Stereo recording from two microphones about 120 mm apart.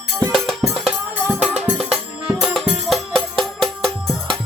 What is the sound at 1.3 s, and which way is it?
Music, 10° right (ahead or behind).